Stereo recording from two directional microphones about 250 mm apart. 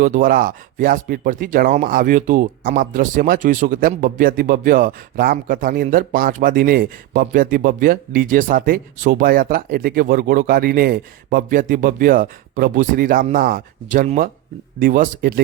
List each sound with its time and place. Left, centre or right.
0.0 s speech: right